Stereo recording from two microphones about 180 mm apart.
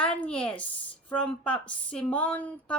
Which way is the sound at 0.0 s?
5° left (ahead or behind).